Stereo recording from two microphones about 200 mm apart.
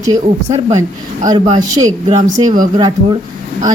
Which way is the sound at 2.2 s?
40° right (ahead or behind).